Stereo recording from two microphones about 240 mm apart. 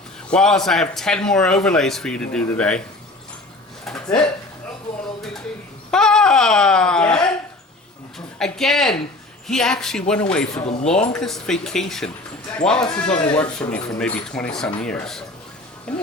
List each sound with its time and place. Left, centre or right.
0.3 s a man's voice: centre
3.8 s a sound: centre
5.9 s a man's voice: centre
8.4 s a man's voice: centre